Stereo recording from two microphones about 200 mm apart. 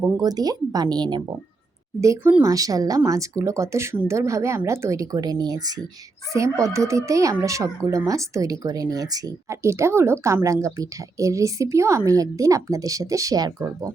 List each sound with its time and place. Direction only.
0.2 s a woman's voice: 20° right (ahead or behind)